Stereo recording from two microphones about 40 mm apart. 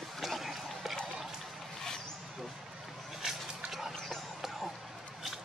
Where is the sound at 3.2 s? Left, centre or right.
Centre.